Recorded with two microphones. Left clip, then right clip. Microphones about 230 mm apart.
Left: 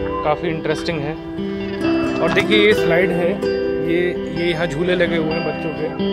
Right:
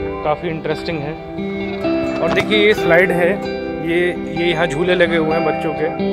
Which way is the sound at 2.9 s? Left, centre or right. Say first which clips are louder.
Right 4 dB; right.